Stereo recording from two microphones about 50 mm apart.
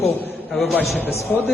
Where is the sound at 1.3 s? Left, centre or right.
Left.